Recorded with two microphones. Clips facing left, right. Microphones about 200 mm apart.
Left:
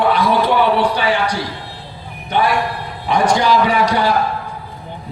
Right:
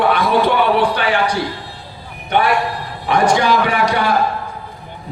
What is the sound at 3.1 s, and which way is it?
Speech, 55° right (ahead or behind).